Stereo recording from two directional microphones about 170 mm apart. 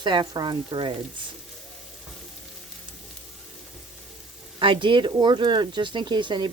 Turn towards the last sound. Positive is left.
turn(degrees=-25)  # may be behind; listen again after turning